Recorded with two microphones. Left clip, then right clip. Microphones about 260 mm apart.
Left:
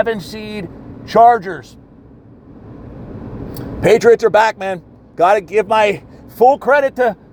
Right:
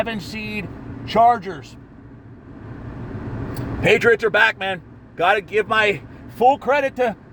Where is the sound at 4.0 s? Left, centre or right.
Centre.